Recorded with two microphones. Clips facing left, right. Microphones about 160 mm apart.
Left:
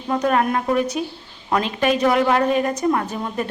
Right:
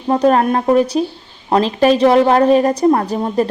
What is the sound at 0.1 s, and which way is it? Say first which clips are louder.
A woman's voice: right 6 dB; 30° right (ahead or behind).